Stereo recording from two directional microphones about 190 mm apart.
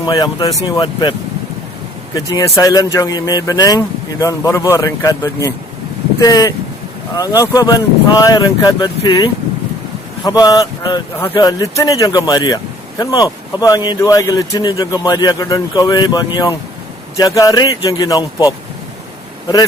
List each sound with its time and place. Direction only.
0.0 s speech: 20° left (ahead or behind)
2.1 s speech: 15° left (ahead or behind)